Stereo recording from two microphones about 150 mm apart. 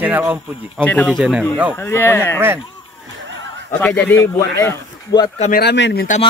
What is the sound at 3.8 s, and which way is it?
Speech, 10° left (ahead or behind).